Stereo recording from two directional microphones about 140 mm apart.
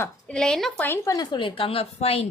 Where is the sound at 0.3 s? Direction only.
5° left (ahead or behind).